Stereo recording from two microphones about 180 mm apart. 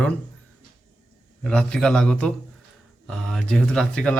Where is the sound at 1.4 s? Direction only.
5° left (ahead or behind).